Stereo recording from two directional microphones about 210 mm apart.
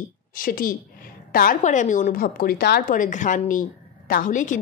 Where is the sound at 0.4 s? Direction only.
40° left (ahead or behind).